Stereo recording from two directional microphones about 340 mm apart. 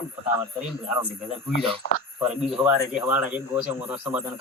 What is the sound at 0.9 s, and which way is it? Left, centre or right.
Speech, centre.